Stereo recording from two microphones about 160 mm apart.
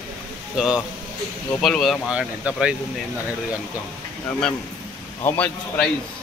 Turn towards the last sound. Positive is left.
turn(degrees=5)  # may be behind; listen again after turning